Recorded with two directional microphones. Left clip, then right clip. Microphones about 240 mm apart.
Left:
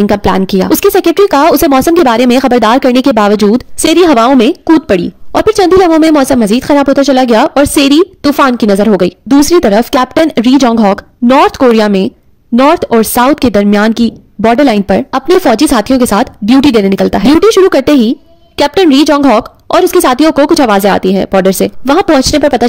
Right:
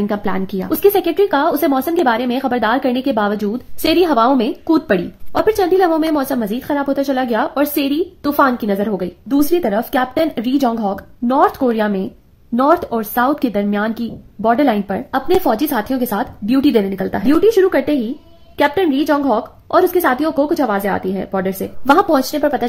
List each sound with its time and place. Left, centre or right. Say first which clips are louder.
0.0 s speech: left 11 dB; left